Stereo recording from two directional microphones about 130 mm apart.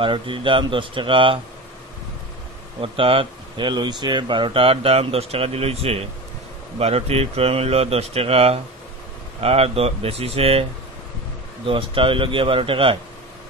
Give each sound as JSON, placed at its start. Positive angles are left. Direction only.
{"t": 0.0, "sound": "a man's voice", "side_deg": -40}
{"t": 2.8, "sound": "speech", "side_deg": -45}
{"t": 11.6, "sound": "speech", "side_deg": -45}